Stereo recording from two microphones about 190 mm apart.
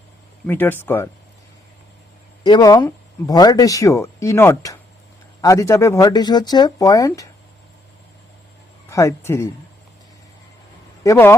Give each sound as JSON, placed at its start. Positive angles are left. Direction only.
{"t": 0.4, "sound": "speech", "side_deg": 10}
{"t": 2.4, "sound": "speech", "side_deg": 20}
{"t": 8.9, "sound": "speech", "side_deg": 15}
{"t": 11.0, "sound": "speech", "side_deg": 15}